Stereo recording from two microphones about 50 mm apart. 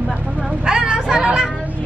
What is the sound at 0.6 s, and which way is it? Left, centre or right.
Speech, centre.